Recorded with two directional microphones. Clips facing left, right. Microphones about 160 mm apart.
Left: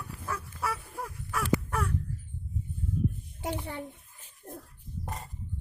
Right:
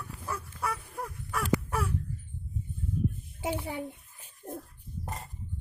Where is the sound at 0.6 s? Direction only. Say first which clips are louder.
Even; centre (ahead or behind).